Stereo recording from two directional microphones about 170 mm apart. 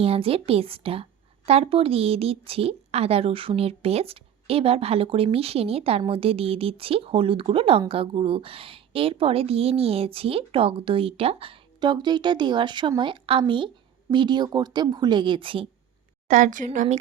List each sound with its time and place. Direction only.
0.0 s a woman's voice: 35° right (ahead or behind)
16.3 s speech: 50° right (ahead or behind)